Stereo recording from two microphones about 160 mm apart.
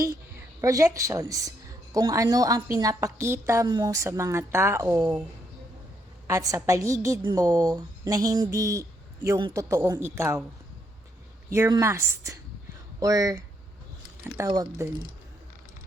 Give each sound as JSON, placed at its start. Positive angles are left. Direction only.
{"t": 0.6, "sound": "a woman's voice", "side_deg": -20}
{"t": 6.2, "sound": "a woman's voice", "side_deg": -20}
{"t": 11.7, "sound": "a woman's voice", "side_deg": -20}